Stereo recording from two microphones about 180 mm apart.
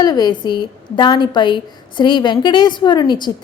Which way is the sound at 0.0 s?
20° left (ahead or behind).